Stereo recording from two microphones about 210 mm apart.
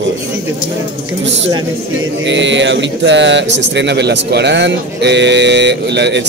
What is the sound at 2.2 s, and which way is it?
Speech, 60° right (ahead or behind).